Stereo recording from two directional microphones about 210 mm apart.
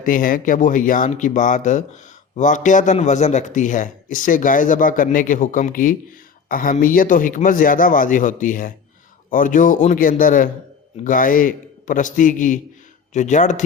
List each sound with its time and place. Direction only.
0.0 s a man's voice: 40° left (ahead or behind)